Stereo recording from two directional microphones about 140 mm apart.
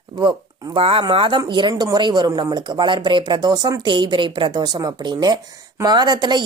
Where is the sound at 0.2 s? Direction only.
35° right (ahead or behind).